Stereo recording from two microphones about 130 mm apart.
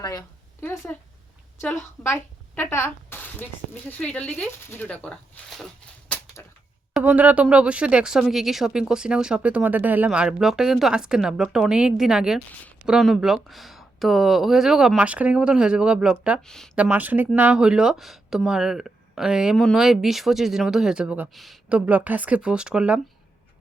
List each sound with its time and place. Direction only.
0.0 s speech: 30° left (ahead or behind)
0.6 s speech: 15° left (ahead or behind)
2.0 s a woman's voice: 20° left (ahead or behind)
6.1 s a sound: 10° left (ahead or behind)
7.0 s speech: 10° right (ahead or behind)
16.4 s speech: 5° left (ahead or behind)
16.7 s speech: 10° right (ahead or behind)
21.7 s speech: 10° right (ahead or behind)